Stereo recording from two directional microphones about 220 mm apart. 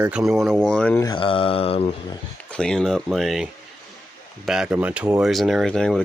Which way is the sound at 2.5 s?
5° left (ahead or behind).